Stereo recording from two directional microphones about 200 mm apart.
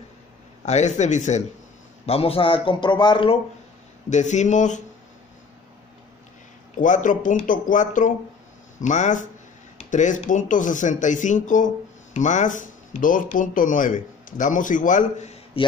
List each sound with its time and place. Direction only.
0.7 s speech: 35° left (ahead or behind)
4.1 s speech: 35° left (ahead or behind)
6.8 s speech: 40° left (ahead or behind)